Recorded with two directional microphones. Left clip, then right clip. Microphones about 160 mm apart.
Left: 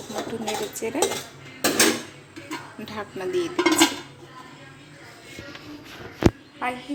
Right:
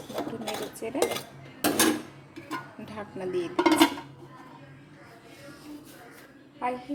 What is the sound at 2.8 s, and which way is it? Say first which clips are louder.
Speech: left 5 dB; 10° right (ahead or behind).